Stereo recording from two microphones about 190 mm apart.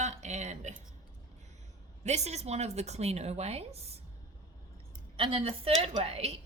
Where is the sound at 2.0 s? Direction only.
35° right (ahead or behind).